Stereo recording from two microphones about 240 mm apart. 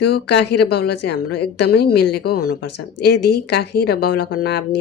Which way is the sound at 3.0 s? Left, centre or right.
Left.